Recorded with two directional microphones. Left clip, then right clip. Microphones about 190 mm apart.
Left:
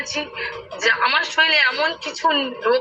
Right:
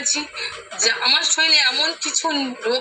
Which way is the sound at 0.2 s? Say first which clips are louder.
Left 1 dB; 55° right (ahead or behind).